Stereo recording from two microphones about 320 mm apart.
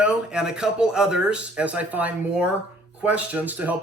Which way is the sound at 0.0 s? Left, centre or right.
Centre.